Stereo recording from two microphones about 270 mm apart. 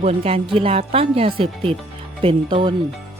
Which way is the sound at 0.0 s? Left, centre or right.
Right.